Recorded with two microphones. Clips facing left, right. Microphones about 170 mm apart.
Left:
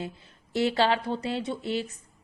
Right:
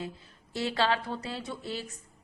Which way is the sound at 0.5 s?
25° left (ahead or behind).